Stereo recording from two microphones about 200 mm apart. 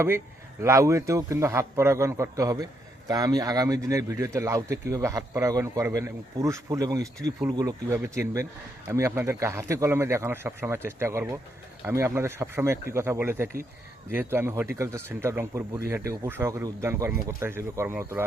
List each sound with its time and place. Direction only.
0.6 s speech: 15° right (ahead or behind)